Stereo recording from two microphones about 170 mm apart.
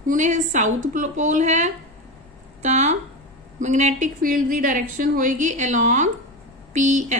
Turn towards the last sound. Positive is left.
turn(degrees=-45)  # may be behind; listen again after turning